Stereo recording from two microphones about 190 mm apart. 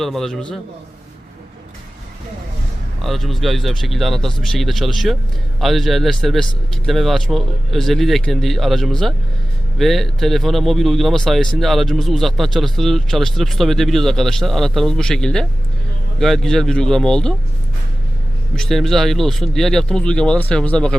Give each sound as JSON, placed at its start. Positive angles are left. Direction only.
{"t": 0.0, "sound": "speech", "side_deg": 0}
{"t": 3.0, "sound": "speech", "side_deg": 0}
{"t": 18.5, "sound": "speech", "side_deg": 0}